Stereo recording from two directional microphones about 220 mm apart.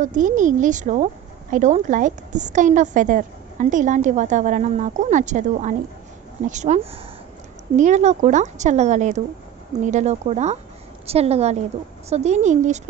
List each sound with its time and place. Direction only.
0.0 s a woman's voice: 35° right (ahead or behind)